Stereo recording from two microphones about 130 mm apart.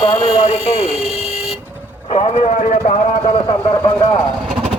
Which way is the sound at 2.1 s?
55° left (ahead or behind).